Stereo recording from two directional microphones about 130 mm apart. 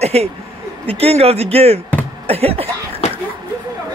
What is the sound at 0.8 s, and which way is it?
Speech, 50° right (ahead or behind).